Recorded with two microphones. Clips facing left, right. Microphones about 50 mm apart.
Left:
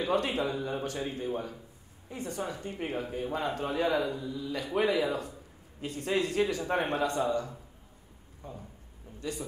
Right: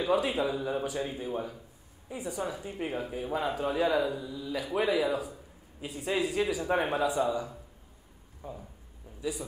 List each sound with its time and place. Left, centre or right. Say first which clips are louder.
0.0 s speech: right 1 dB; centre